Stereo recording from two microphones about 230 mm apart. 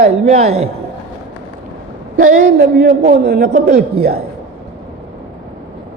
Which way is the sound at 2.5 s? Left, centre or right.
Right.